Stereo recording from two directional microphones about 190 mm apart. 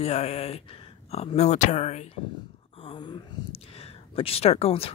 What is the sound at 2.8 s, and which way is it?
Speech, 25° left (ahead or behind).